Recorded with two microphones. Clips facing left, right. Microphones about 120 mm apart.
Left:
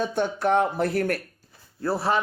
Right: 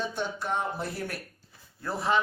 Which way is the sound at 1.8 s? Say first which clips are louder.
Left 3 dB; 35° left (ahead or behind).